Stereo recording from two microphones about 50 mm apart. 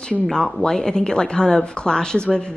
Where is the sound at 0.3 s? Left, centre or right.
Centre.